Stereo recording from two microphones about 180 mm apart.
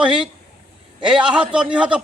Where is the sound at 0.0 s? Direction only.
5° right (ahead or behind).